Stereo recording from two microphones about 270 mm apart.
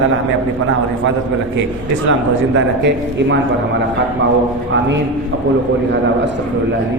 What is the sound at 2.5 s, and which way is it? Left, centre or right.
Speech, right.